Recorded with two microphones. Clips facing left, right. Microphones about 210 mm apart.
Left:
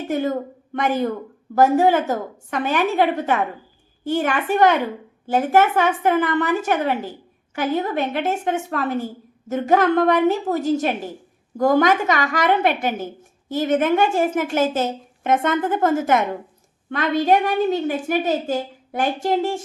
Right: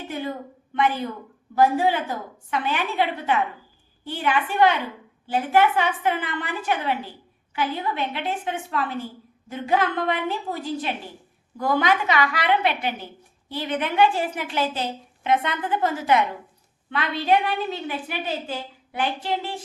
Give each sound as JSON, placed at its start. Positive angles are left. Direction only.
{"t": 0.1, "sound": "a woman's voice", "side_deg": 45}